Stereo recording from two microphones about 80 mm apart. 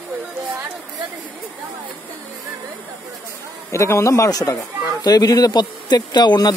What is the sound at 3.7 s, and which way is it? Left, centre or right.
Speech, left.